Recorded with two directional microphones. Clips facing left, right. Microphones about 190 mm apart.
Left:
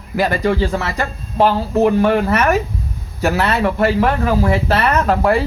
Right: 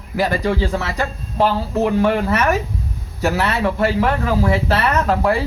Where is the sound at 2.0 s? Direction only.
50° left (ahead or behind).